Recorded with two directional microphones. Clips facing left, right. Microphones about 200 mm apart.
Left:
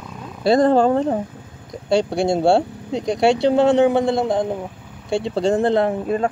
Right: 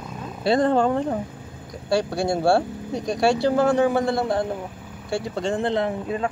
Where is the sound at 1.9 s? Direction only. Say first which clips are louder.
Left 4 dB; 20° left (ahead or behind); by 6.3 s 50° left (ahead or behind).